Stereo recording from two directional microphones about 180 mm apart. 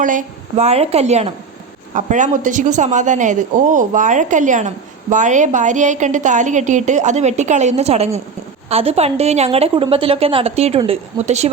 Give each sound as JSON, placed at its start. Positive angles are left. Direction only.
{"t": 0.0, "sound": "a woman's voice", "side_deg": -45}